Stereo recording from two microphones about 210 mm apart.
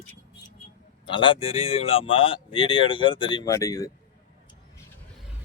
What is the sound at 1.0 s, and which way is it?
Speech, 25° left (ahead or behind).